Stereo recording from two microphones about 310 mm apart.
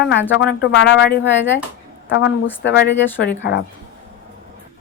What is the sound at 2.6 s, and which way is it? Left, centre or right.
A woman's voice, left.